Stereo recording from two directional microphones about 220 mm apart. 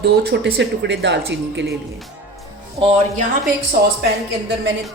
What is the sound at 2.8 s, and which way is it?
Speech, 25° right (ahead or behind).